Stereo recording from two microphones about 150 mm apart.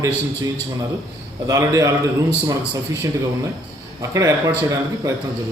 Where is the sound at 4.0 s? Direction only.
20° right (ahead or behind).